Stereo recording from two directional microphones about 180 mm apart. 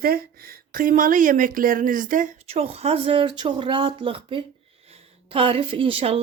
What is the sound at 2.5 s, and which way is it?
Speech, 35° right (ahead or behind).